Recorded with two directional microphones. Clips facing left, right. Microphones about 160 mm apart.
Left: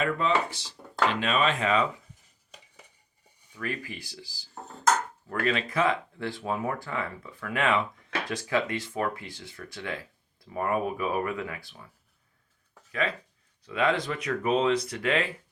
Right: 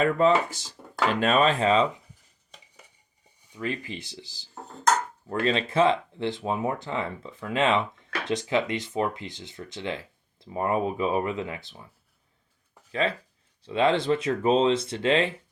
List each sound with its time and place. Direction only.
0.0 s speech: 40° right (ahead or behind)
3.5 s speech: 20° right (ahead or behind)
12.9 s speech: 30° right (ahead or behind)